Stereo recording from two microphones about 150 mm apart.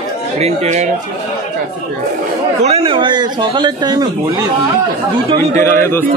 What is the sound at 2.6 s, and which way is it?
Speech, 45° right (ahead or behind).